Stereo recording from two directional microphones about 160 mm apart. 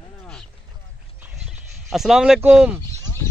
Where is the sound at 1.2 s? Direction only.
5° right (ahead or behind).